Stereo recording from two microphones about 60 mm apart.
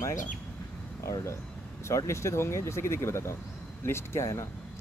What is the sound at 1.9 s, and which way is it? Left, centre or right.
Speech, left.